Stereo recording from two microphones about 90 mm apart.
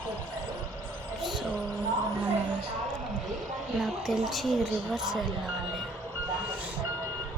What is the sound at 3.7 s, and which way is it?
A woman's voice, centre (ahead or behind).